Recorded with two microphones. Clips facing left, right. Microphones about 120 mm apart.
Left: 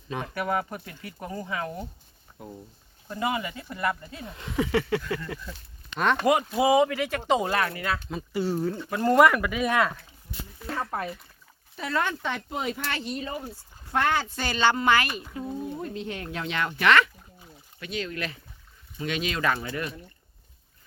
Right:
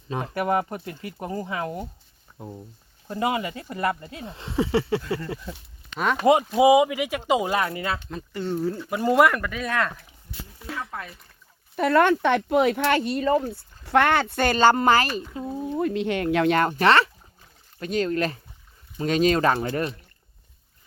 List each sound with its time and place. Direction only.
0.1 s speech: 30° right (ahead or behind)
3.1 s speech: 30° right (ahead or behind)
6.0 s speech: 5° right (ahead or behind)
7.6 s speech: 25° right (ahead or behind)
8.1 s speech: 10° left (ahead or behind)
10.8 s a sound: 30° left (ahead or behind)
11.8 s speech: 60° right (ahead or behind)
13.0 s speech: 55° right (ahead or behind); by 15.2 s 35° right (ahead or behind)
15.8 s speech: 75° right (ahead or behind)
16.5 s speech: 45° right (ahead or behind)